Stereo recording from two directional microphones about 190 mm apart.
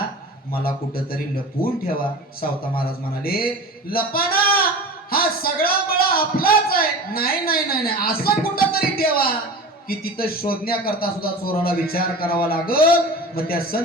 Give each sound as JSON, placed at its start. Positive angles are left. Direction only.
{"t": 0.6, "sound": "a man's voice", "side_deg": 50}
{"t": 2.4, "sound": "a man's voice", "side_deg": 50}